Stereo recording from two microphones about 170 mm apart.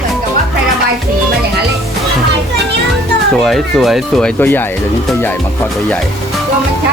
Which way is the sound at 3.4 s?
Centre (ahead or behind).